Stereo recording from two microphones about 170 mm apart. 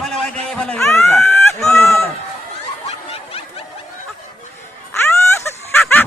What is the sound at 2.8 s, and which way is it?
Snicker, 35° left (ahead or behind).